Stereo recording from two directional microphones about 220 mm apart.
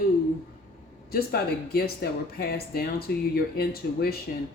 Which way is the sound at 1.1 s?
45° left (ahead or behind).